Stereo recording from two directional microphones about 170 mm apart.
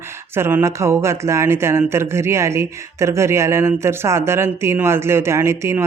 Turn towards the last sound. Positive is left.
turn(degrees=-15)  # may be behind; listen again after turning